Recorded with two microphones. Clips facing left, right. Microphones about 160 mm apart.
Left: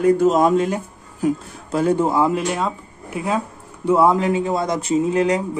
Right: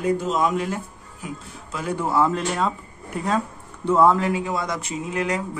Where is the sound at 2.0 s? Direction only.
15° left (ahead or behind).